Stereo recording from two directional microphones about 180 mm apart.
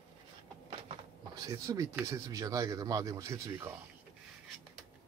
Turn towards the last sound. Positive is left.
turn(degrees=-15)  # may be behind; listen again after turning